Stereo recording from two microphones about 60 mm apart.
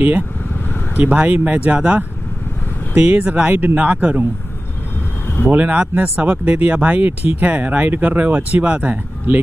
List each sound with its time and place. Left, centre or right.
0.9 s speech: right
5.5 s speech: right